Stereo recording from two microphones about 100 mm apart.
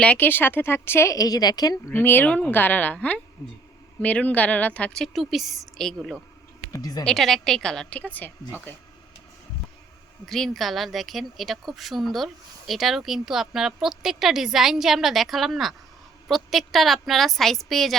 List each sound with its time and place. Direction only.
0.0 s a woman's voice: 15° left (ahead or behind); by 1.7 s 40° left (ahead or behind)
1.9 s speech: 20° left (ahead or behind)
3.4 s speech: 30° left (ahead or behind)
4.0 s a woman's voice: 15° left (ahead or behind)
6.7 s speech: 40° left (ahead or behind)
7.0 s a woman's voice: centre (ahead or behind)
10.2 s a woman's voice: centre (ahead or behind)